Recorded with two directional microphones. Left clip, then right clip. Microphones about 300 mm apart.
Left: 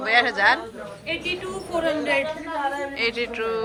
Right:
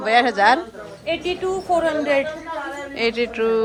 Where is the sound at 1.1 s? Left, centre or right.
Right.